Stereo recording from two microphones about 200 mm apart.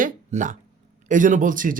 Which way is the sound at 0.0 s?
40° right (ahead or behind).